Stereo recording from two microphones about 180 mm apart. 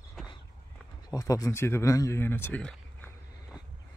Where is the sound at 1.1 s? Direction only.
20° left (ahead or behind).